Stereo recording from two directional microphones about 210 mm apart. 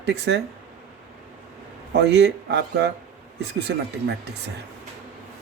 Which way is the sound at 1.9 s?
50° right (ahead or behind).